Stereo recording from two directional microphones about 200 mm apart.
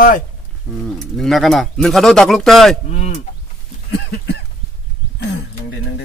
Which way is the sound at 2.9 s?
35° left (ahead or behind).